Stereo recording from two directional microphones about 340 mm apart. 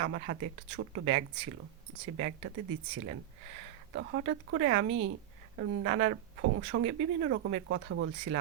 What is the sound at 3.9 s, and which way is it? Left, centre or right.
Speech, right.